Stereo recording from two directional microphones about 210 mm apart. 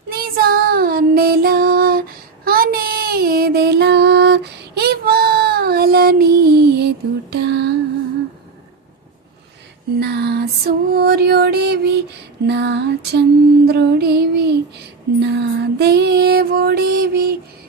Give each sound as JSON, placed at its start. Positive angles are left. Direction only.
{"t": 0.1, "sound": "child singing", "side_deg": -45}
{"t": 10.0, "sound": "music", "side_deg": -50}